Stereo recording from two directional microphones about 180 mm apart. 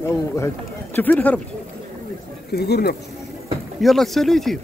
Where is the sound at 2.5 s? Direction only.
60° left (ahead or behind).